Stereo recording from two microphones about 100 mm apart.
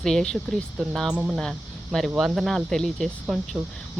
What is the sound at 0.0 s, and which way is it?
Speech, 5° left (ahead or behind).